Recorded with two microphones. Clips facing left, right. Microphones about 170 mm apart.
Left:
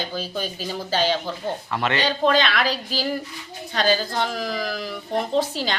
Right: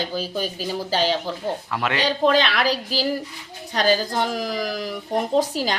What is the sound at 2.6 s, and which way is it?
Speech, 35° right (ahead or behind).